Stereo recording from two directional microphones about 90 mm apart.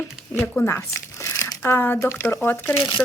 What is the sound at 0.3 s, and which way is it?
A woman's voice, 25° left (ahead or behind).